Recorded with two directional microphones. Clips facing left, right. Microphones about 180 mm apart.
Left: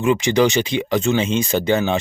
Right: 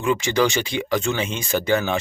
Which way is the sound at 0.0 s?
20° left (ahead or behind).